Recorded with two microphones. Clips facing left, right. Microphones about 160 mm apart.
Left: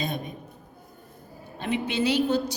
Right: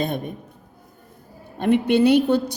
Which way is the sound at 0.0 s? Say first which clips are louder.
Right 6 dB; 55° right (ahead or behind).